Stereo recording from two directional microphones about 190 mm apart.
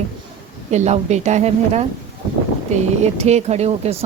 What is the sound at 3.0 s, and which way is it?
Speech, 35° right (ahead or behind).